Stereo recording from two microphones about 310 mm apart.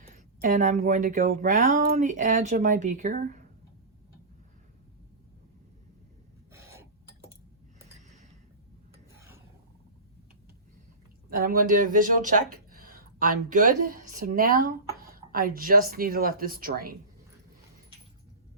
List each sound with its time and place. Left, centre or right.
0.4 s speech: right
6.5 s a sound: centre
9.1 s filing: centre
11.3 s speech: right